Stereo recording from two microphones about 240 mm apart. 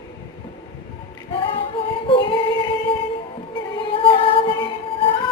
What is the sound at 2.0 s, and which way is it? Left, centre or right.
Female singing, centre.